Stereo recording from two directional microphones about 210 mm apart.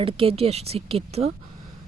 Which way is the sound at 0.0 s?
25° right (ahead or behind).